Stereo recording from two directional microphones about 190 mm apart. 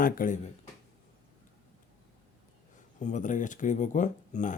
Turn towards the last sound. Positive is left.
turn(degrees=40)  # may be behind; listen again after turning